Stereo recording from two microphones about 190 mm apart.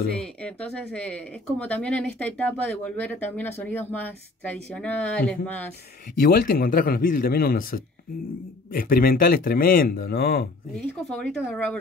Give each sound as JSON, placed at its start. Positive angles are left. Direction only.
{"t": 0.2, "sound": "speech", "side_deg": 5}
{"t": 6.1, "sound": "speech", "side_deg": 50}
{"t": 11.1, "sound": "speech", "side_deg": 5}